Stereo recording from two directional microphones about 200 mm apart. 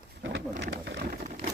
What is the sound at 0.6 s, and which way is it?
Speech, 60° right (ahead or behind).